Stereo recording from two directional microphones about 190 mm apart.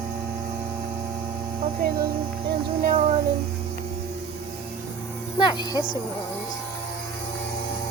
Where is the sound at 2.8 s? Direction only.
40° right (ahead or behind).